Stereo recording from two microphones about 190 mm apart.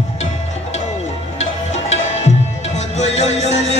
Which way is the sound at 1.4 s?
35° left (ahead or behind).